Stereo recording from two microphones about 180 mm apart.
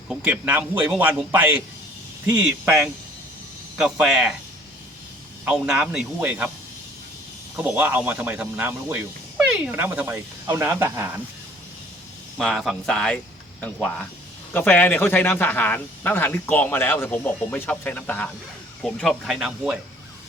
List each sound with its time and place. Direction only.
0.1 s speech: 5° right (ahead or behind)
5.5 s speech: 5° right (ahead or behind)
7.5 s speech: 10° right (ahead or behind)
12.4 s speech: centre (ahead or behind)